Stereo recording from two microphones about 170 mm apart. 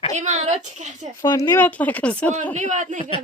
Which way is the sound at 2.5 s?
45° right (ahead or behind).